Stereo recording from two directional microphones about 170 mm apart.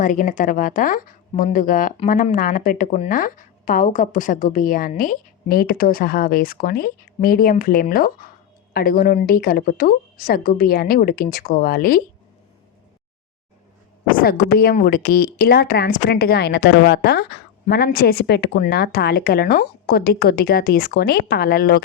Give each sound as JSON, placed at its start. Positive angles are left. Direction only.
{"t": 0.0, "sound": "a woman's voice", "side_deg": 50}
{"t": 14.1, "sound": "a woman's voice", "side_deg": 60}